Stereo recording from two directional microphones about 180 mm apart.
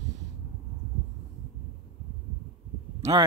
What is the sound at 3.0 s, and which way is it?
Speech, 30° right (ahead or behind).